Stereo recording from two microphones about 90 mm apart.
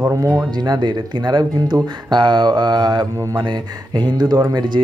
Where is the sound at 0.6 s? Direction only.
50° right (ahead or behind).